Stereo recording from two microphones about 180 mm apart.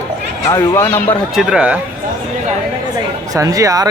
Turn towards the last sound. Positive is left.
turn(degrees=-20)  # may be behind; listen again after turning